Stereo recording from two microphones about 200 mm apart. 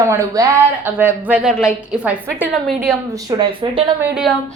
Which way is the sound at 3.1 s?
20° right (ahead or behind).